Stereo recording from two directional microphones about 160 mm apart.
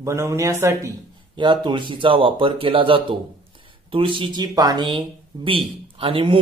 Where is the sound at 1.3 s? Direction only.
30° right (ahead or behind).